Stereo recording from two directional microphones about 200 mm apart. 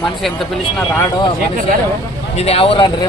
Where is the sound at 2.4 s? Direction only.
30° left (ahead or behind).